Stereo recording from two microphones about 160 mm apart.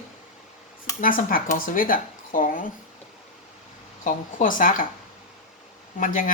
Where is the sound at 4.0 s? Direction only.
55° left (ahead or behind).